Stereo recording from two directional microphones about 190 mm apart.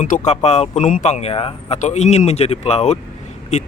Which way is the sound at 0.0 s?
40° left (ahead or behind).